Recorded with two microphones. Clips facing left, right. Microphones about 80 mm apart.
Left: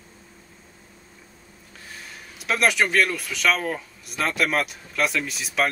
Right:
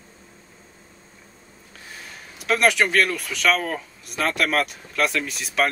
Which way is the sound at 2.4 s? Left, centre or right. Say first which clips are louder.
Right 2 dB; centre.